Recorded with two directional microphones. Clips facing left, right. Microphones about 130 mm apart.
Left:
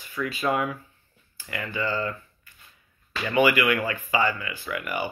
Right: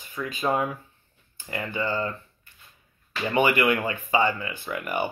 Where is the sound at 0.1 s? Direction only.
20° right (ahead or behind).